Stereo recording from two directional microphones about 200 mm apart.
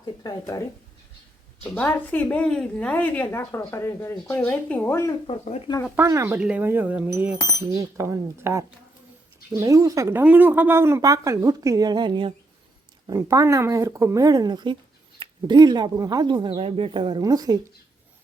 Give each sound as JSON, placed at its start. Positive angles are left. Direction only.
{"t": 0.0, "sound": "a woman's voice", "side_deg": 20}
{"t": 1.6, "sound": "a woman's voice", "side_deg": 5}
{"t": 5.2, "sound": "speech", "side_deg": 25}
{"t": 6.0, "sound": "speech", "side_deg": -15}